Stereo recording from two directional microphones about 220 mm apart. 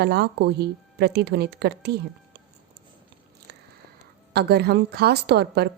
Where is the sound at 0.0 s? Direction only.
50° right (ahead or behind).